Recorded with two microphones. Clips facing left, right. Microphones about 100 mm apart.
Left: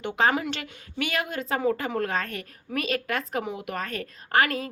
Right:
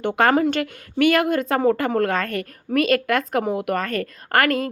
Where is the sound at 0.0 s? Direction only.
55° right (ahead or behind).